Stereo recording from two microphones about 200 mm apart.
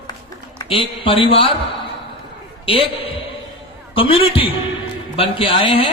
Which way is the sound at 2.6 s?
25° left (ahead or behind).